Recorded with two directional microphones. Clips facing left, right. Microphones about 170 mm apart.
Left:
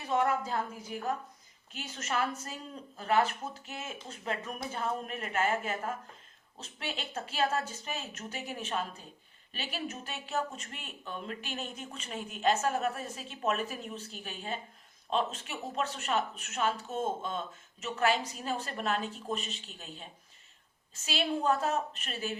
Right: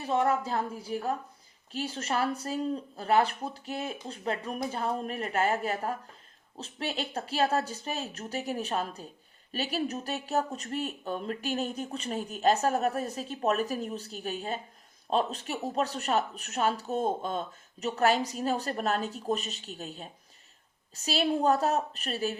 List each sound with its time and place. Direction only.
0.0 s speech: 30° right (ahead or behind)